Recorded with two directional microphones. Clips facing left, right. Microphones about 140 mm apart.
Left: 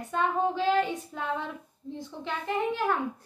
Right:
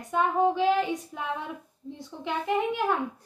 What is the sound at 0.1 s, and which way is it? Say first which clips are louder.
A woman's voice: right 3 dB; 15° right (ahead or behind).